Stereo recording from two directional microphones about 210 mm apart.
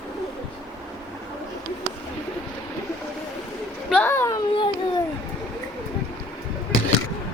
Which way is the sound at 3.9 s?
10° left (ahead or behind).